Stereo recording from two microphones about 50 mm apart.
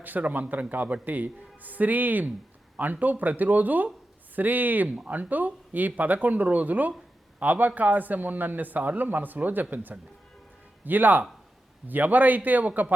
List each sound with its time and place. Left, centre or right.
0.0 s a man's voice: right